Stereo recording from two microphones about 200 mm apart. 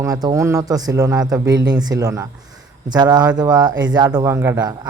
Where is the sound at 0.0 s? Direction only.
20° right (ahead or behind).